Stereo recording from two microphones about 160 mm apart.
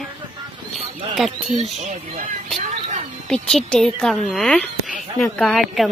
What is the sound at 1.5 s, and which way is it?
Speech, 45° right (ahead or behind).